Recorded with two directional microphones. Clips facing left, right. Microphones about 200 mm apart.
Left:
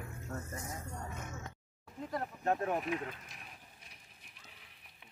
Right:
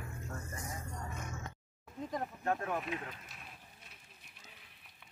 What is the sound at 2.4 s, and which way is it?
Speech, 20° left (ahead or behind).